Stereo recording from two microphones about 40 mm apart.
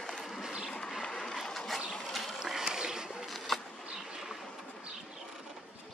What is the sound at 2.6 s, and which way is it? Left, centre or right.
Boat, centre.